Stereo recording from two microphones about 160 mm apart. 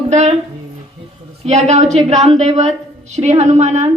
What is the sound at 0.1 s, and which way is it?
Speech, 45° right (ahead or behind).